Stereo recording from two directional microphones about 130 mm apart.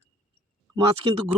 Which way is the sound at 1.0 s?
40° right (ahead or behind).